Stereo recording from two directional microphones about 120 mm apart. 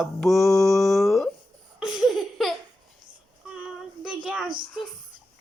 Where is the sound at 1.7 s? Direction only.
5° right (ahead or behind).